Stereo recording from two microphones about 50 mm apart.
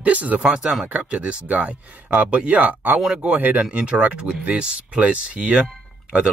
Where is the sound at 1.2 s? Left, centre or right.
Right.